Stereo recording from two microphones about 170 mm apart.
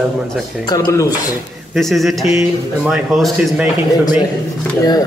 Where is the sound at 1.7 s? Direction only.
Centre (ahead or behind).